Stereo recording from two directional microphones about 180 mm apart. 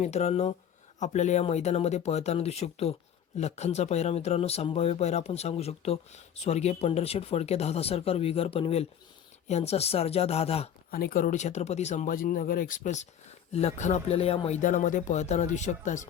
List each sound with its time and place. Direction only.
0.0 s speech: 40° left (ahead or behind)
10.9 s speech: 50° left (ahead or behind)